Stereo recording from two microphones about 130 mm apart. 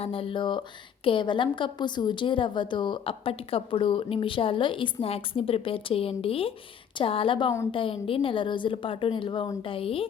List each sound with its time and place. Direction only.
0.0 s a woman's voice: 45° left (ahead or behind)